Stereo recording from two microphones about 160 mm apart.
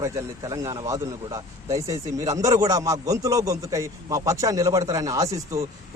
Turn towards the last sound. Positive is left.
turn(degrees=-20)  # may be behind; listen again after turning